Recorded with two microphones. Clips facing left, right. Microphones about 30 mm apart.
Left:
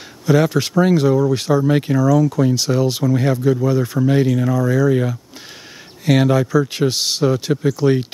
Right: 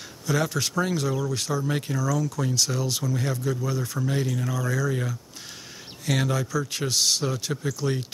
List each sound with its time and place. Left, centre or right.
0.3 s speech: left